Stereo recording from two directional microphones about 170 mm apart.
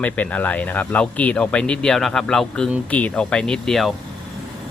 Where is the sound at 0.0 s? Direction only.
10° left (ahead or behind).